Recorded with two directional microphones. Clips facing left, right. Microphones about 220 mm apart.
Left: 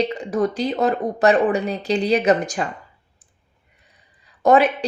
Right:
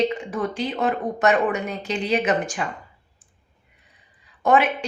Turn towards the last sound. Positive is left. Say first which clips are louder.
# left 4 dB
turn(degrees=40)  # may be behind; listen again after turning